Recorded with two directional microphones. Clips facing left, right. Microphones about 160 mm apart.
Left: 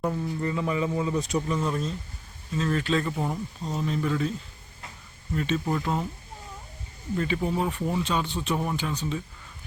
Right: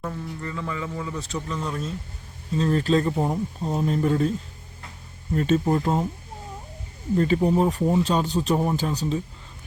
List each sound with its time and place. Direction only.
0.0 s speech: 20° left (ahead or behind)
2.6 s speech: 35° right (ahead or behind)
3.7 s speech: 40° right (ahead or behind)
5.3 s speech: 40° right (ahead or behind)
7.4 s speech: 40° right (ahead or behind)